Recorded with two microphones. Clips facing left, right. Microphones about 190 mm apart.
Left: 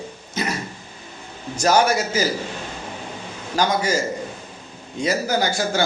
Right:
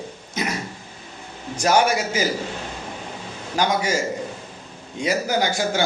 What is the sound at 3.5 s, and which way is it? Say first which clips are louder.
Speech: left 1 dB; 15° right (ahead or behind).